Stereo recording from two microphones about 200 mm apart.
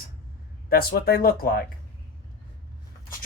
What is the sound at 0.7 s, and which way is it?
Speech, 50° left (ahead or behind).